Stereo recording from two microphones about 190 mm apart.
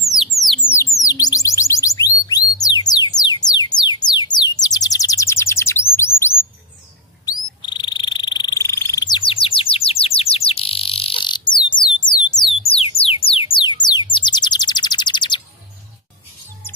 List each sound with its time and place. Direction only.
0.1 s a sound: centre (ahead or behind)
1.0 s chirp tone: 20° left (ahead or behind)
5.9 s bird: 15° left (ahead or behind)
7.2 s frog: 20° left (ahead or behind)
13.8 s bird: 25° left (ahead or behind)